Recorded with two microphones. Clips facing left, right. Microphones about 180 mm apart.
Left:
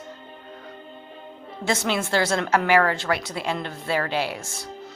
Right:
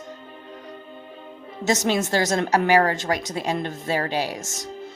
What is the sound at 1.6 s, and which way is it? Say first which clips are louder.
A woman's voice: right 3 dB; 40° right (ahead or behind).